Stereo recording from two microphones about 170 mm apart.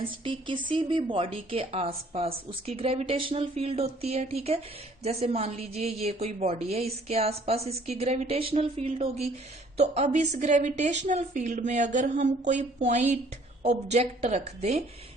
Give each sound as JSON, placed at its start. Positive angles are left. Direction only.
{"t": 0.0, "sound": "a woman's voice", "side_deg": -30}